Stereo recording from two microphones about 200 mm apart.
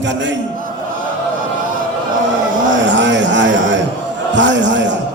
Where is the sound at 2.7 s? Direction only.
65° right (ahead or behind).